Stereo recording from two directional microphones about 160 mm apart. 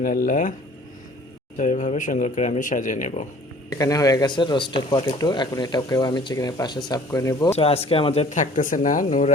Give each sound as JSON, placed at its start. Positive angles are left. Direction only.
{"t": 0.0, "sound": "speech", "side_deg": 60}
{"t": 1.5, "sound": "speech", "side_deg": 50}
{"t": 3.7, "sound": "speech", "side_deg": 20}
{"t": 7.5, "sound": "speech", "side_deg": 40}
{"t": 9.0, "sound": "speech", "side_deg": 45}